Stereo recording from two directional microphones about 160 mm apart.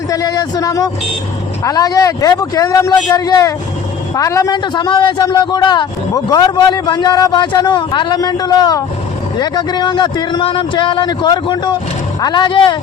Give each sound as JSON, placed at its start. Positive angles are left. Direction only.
{"t": 0.1, "sound": "a man's voice", "side_deg": 25}